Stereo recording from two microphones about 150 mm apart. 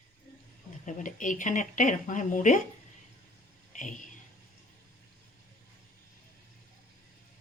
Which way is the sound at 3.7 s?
55° left (ahead or behind).